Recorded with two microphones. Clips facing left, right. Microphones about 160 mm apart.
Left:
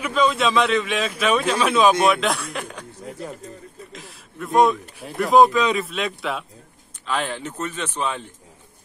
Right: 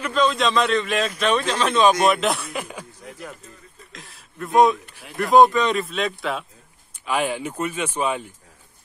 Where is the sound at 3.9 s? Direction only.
Centre (ahead or behind).